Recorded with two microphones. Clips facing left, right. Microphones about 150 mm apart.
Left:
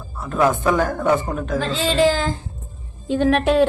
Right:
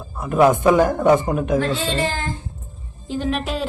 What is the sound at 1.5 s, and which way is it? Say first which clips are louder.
Speech: left 5 dB; 90° left.